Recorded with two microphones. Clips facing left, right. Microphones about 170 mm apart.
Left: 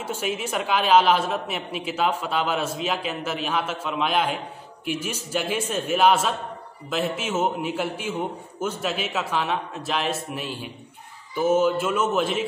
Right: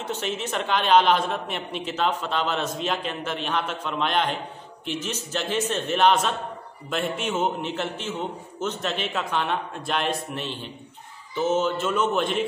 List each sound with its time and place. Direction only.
0.0 s a woman's voice: 10° left (ahead or behind)